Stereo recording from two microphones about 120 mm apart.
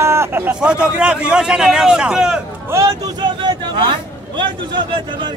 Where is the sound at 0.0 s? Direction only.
20° right (ahead or behind); by 2.4 s 5° right (ahead or behind).